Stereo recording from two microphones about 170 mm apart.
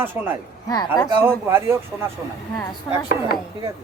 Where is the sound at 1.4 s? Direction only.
15° right (ahead or behind).